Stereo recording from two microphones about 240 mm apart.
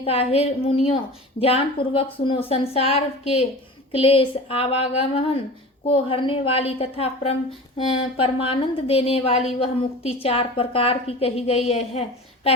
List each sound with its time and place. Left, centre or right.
0.0 s a woman's voice: left